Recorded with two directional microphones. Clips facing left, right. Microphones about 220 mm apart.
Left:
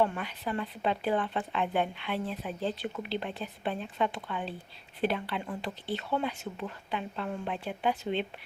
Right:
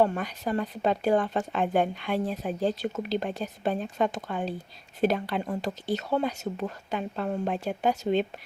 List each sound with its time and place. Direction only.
0.0 s speech: 40° right (ahead or behind)